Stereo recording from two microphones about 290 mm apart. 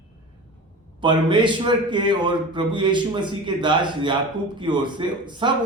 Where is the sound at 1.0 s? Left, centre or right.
Centre.